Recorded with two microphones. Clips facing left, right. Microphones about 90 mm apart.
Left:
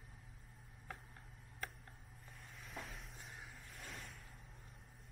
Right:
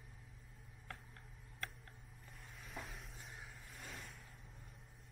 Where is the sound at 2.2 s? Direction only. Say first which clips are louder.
Even; centre (ahead or behind).